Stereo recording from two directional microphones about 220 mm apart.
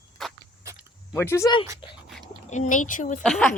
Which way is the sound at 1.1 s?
10° left (ahead or behind).